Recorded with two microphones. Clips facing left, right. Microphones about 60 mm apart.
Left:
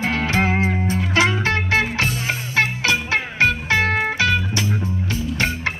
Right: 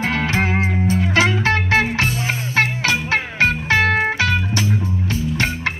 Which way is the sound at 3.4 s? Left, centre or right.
Right.